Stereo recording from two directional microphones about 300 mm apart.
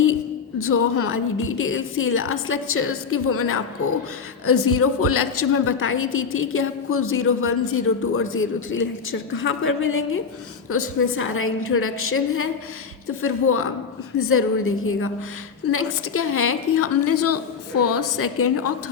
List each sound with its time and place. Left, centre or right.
0.6 s a woman's voice: left